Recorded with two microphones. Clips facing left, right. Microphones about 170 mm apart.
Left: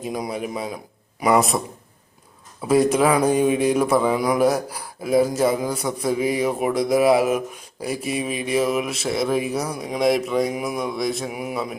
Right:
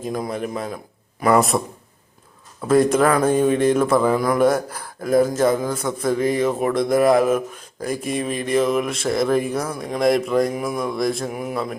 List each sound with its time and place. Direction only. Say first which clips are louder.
0.0 s a man's voice: right 2 dB; 5° left (ahead or behind)
4.2 s a man's voice: right 1 dB; 15° left (ahead or behind)